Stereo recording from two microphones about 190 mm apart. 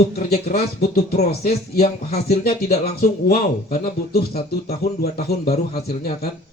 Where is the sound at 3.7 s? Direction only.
55° left (ahead or behind).